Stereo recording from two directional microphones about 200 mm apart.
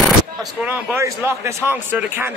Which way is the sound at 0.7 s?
10° right (ahead or behind).